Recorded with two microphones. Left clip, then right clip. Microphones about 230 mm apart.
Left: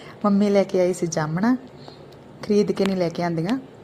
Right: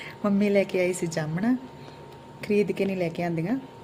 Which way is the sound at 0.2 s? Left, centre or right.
Centre.